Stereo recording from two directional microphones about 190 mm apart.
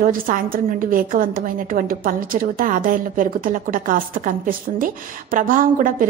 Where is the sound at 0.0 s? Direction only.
45° right (ahead or behind).